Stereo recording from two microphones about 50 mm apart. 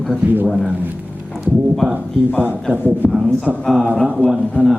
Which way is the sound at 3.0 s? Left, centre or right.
Left.